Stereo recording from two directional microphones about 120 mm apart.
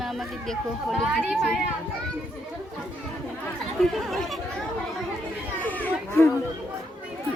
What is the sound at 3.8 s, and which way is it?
Speech, centre (ahead or behind).